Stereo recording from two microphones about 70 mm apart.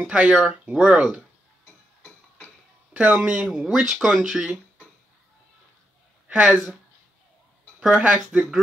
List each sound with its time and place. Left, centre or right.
0.0 s speech: centre
2.9 s speech: centre
7.8 s speech: centre